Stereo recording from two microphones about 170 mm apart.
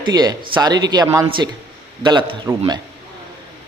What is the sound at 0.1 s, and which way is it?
A man's voice, 25° right (ahead or behind).